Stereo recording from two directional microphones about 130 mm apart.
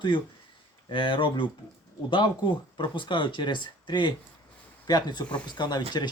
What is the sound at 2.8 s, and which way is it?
Speech, 40° left (ahead or behind).